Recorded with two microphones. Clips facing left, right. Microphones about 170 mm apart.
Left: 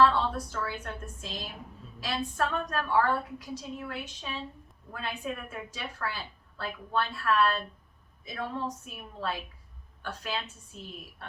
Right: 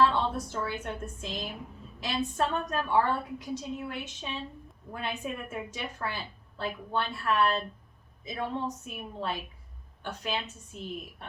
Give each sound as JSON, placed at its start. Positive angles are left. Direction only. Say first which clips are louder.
{"t": 0.0, "sound": "a woman's voice", "louder": "left 1 dB", "side_deg": -20}